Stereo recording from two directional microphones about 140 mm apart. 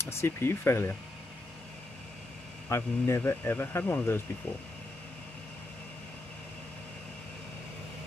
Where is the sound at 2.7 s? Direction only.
20° left (ahead or behind).